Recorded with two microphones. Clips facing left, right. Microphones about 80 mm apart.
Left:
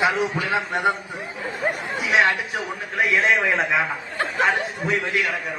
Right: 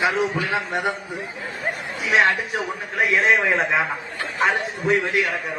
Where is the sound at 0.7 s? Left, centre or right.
Left.